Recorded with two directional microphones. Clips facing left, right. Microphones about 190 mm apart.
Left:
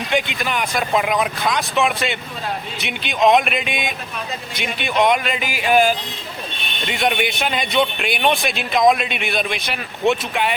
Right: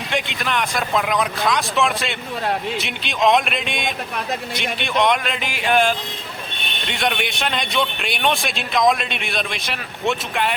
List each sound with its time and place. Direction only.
0.1 s a man's voice: centre (ahead or behind)